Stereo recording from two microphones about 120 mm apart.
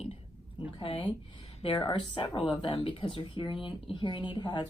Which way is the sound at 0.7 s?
50° left (ahead or behind).